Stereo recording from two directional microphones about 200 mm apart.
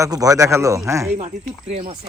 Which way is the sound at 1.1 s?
35° right (ahead or behind).